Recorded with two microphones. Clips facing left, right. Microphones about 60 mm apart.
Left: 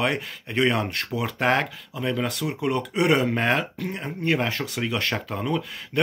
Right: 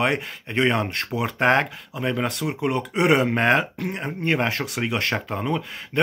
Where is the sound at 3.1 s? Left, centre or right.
Centre.